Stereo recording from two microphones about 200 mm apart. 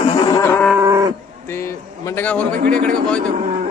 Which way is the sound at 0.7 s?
10° right (ahead or behind).